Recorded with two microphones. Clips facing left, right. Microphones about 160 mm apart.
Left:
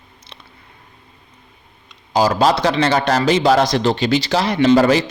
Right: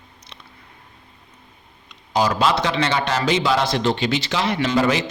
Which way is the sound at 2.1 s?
35° left (ahead or behind).